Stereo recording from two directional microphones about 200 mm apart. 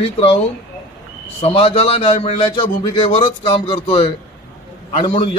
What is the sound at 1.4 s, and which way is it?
A man's voice, 30° left (ahead or behind).